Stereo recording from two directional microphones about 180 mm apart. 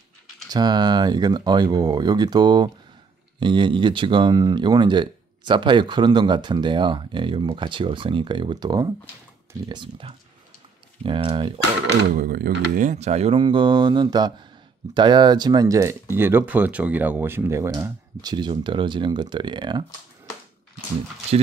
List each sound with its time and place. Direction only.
0.5 s speech: 25° right (ahead or behind)
12.1 s speech: 55° right (ahead or behind); by 19.8 s 25° right (ahead or behind)